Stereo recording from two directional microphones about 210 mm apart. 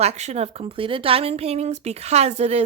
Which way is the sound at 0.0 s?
30° right (ahead or behind).